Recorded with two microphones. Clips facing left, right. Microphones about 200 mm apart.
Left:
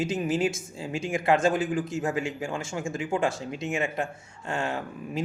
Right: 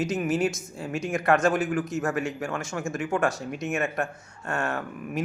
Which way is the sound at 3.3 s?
25° left (ahead or behind).